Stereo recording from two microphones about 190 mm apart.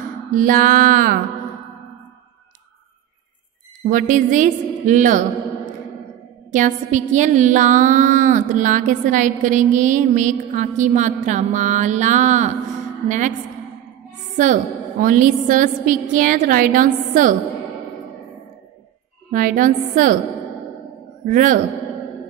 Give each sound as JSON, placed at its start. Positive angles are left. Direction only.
{"t": 0.3, "sound": "a woman's voice", "side_deg": -45}
{"t": 3.9, "sound": "a woman's voice", "side_deg": -45}
{"t": 6.5, "sound": "a woman's voice", "side_deg": -40}
{"t": 14.3, "sound": "a woman's voice", "side_deg": -40}
{"t": 19.3, "sound": "a woman's voice", "side_deg": -45}
{"t": 21.3, "sound": "a woman's voice", "side_deg": -45}